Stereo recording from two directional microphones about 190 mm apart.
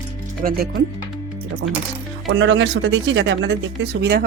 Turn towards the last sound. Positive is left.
turn(degrees=-60)  # may be behind; listen again after turning